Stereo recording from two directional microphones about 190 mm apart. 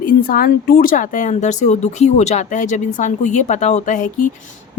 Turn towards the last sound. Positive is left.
turn(degrees=40)  # may be behind; listen again after turning